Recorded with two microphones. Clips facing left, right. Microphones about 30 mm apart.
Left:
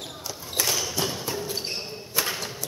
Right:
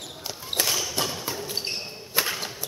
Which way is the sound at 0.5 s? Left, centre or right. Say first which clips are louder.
Right 1 dB; right.